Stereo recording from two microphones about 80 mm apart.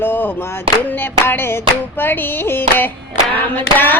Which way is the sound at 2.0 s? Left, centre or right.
Left.